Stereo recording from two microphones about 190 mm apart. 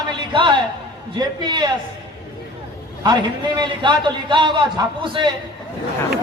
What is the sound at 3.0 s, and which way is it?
A man's voice, 20° right (ahead or behind).